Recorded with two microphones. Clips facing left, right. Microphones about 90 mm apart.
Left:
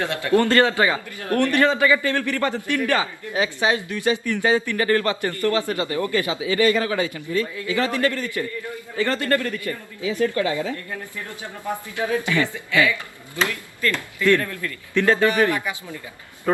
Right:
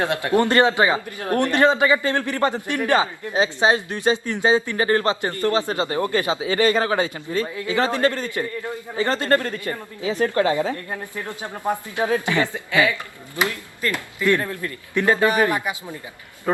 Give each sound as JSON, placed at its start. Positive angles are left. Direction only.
{"t": 0.0, "sound": "speech", "side_deg": -20}
{"t": 10.6, "sound": "speech", "side_deg": -50}
{"t": 11.1, "sound": "speech", "side_deg": -20}